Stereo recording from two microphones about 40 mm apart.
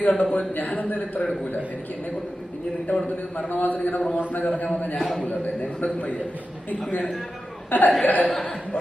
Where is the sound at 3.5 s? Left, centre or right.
Left.